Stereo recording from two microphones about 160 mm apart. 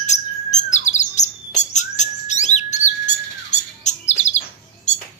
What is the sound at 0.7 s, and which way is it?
Chirp, 45° left (ahead or behind).